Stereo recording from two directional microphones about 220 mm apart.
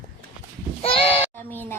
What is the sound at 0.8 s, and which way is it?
Speech, 25° left (ahead or behind).